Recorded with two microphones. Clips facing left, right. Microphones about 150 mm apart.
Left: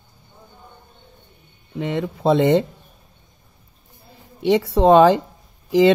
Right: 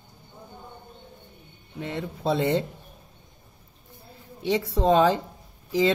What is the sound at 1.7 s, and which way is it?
Speech, 90° left.